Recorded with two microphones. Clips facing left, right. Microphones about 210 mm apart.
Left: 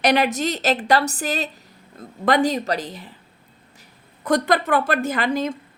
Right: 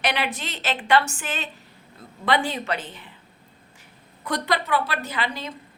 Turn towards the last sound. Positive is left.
turn(degrees=45)  # may be behind; listen again after turning